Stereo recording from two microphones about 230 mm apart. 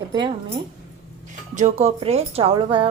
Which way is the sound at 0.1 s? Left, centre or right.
Centre.